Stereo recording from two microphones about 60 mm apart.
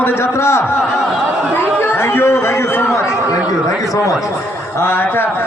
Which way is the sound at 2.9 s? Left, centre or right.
Left.